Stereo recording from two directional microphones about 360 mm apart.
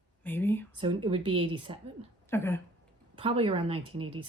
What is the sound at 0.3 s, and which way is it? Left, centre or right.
Speech, centre.